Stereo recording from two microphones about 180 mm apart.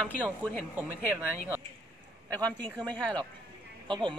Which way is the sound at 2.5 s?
5° left (ahead or behind).